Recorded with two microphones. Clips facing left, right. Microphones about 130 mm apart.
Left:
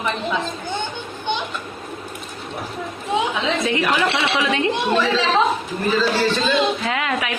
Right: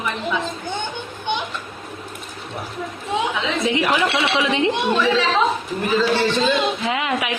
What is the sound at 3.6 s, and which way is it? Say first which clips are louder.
Speech: right 2 dB; 20° right (ahead or behind).